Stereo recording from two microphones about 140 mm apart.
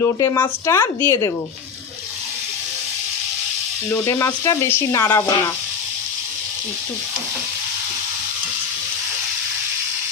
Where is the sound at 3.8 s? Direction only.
20° left (ahead or behind).